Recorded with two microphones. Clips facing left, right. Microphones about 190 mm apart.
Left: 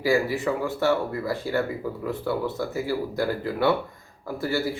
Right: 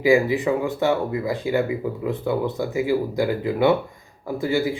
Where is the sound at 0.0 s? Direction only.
15° right (ahead or behind).